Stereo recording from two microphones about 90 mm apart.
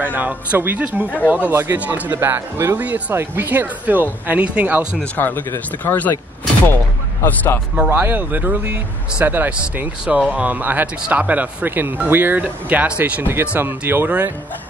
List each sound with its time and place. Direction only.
0.0 s speech: 20° right (ahead or behind)
5.0 s speech: 20° left (ahead or behind)
7.2 s speech: 20° left (ahead or behind)
7.9 s speech: 25° right (ahead or behind)